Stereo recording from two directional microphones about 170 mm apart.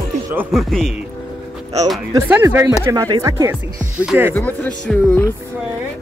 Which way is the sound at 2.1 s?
15° right (ahead or behind).